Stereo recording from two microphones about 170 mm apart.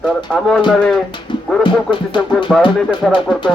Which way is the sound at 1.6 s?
30° left (ahead or behind).